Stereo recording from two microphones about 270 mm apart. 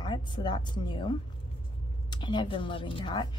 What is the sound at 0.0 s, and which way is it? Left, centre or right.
A woman's voice, centre.